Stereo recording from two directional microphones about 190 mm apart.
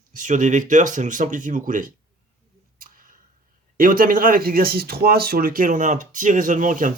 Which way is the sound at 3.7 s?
50° right (ahead or behind).